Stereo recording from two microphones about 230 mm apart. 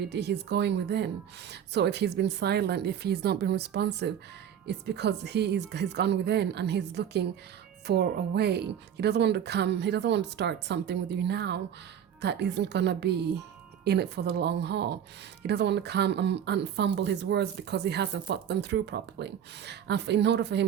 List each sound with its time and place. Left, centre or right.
0.1 s speech: right